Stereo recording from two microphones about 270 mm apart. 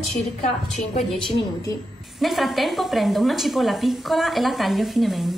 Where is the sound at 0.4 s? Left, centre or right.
Left.